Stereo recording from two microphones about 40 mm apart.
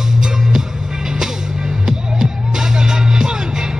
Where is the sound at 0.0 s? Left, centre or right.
Centre.